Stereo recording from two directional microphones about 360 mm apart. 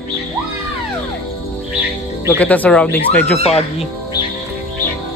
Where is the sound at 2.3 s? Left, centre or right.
Centre.